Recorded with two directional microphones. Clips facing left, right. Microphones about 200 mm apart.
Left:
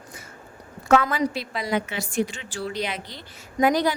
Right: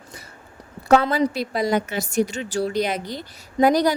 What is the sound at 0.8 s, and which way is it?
A woman's voice, 35° right (ahead or behind).